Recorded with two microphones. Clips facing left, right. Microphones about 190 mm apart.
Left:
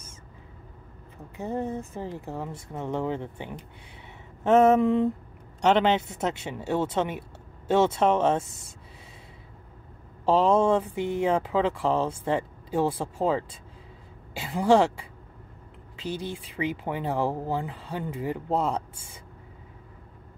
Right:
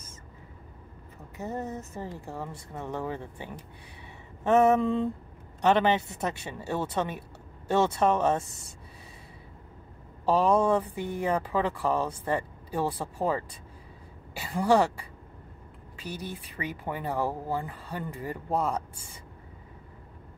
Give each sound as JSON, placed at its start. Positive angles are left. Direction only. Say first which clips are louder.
{"t": 1.4, "sound": "speech", "louder": "left 4 dB", "side_deg": 15}
{"t": 4.8, "sound": "speech", "louder": "left 4 dB", "side_deg": 20}
{"t": 10.2, "sound": "a woman's voice", "louder": "left 2 dB", "side_deg": 25}